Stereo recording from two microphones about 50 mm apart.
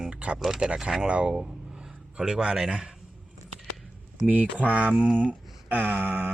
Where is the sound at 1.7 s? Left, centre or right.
Centre.